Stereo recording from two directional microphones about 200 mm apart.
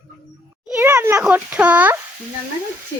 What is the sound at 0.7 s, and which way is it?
A child's voice, 10° right (ahead or behind).